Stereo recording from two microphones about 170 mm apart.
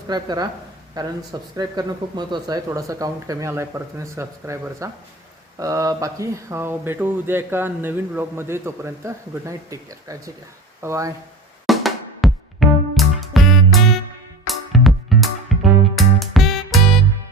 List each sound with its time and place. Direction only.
0.1 s speech: 25° right (ahead or behind)
11.6 s music: centre (ahead or behind)